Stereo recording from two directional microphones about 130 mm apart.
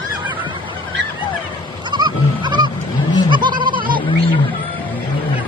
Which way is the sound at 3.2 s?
35° right (ahead or behind).